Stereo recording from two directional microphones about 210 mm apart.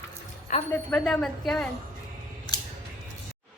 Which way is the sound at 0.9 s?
5° left (ahead or behind).